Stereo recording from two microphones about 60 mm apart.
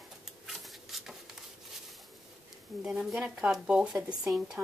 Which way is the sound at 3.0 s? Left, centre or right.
Centre.